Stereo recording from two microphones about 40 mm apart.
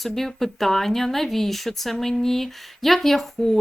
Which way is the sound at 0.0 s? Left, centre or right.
Centre.